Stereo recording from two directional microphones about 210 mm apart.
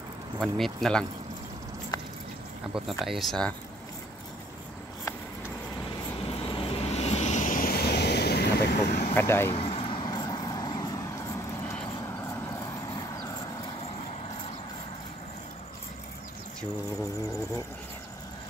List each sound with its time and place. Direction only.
0.4 s speech: centre (ahead or behind)
2.7 s speech: centre (ahead or behind)
6.2 s vehicle: 25° left (ahead or behind); by 9.0 s 50° left (ahead or behind)
9.1 s speech: 10° left (ahead or behind)
9.5 s vehicle: 30° left (ahead or behind)
12.4 s vehicle: 15° left (ahead or behind)